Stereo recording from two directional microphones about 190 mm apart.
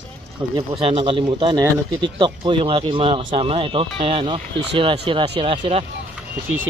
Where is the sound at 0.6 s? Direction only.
30° right (ahead or behind).